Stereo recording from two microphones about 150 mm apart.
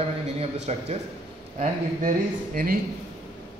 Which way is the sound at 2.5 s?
75° right (ahead or behind).